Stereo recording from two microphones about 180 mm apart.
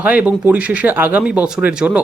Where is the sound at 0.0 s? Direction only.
10° right (ahead or behind).